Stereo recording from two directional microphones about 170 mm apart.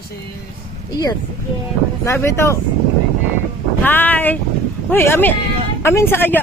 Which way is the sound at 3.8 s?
10° left (ahead or behind).